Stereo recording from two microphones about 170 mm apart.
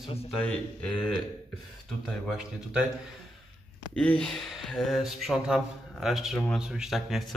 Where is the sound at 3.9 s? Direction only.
5° left (ahead or behind).